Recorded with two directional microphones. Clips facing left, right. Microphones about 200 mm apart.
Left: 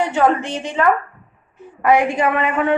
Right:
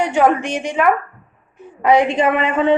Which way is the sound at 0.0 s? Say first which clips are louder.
Right 2 dB; 15° right (ahead or behind).